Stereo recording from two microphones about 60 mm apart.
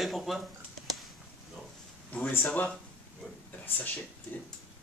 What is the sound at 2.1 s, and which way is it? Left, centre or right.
Speech, left.